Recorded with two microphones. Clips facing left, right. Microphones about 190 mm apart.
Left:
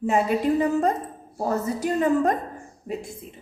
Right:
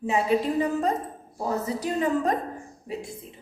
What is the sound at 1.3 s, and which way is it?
A woman's voice, 45° left (ahead or behind).